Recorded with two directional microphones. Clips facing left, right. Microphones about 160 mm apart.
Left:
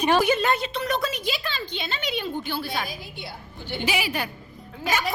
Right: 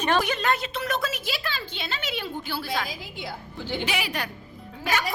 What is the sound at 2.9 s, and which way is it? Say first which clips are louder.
Speech: right 2 dB; 90° right.